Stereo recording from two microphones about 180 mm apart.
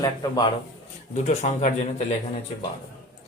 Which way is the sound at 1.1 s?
40° left (ahead or behind).